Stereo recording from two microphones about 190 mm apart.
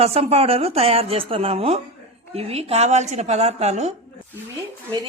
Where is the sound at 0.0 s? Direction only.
30° right (ahead or behind).